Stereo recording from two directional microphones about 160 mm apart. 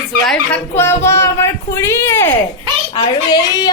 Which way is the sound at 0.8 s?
15° left (ahead or behind).